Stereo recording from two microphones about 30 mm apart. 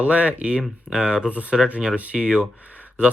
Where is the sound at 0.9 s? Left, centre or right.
Centre.